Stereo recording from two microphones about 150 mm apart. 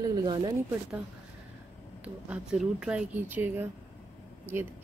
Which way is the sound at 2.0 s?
5° right (ahead or behind).